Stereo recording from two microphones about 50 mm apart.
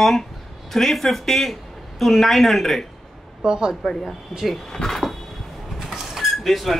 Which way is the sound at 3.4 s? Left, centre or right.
Centre.